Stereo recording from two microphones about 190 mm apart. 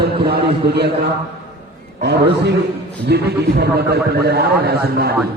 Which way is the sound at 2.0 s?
60° right (ahead or behind).